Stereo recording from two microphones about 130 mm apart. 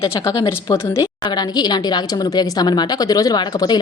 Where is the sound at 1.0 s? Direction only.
35° left (ahead or behind).